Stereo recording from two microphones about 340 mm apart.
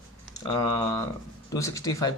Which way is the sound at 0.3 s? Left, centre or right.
Centre.